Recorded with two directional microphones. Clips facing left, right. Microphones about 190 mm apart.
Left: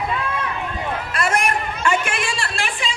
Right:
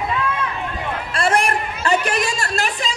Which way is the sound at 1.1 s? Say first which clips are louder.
Right 3 dB; 30° right (ahead or behind).